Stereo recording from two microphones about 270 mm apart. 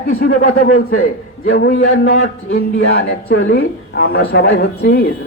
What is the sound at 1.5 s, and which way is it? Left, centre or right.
Speech, left.